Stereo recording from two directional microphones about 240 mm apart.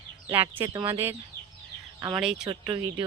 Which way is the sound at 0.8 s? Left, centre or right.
Centre.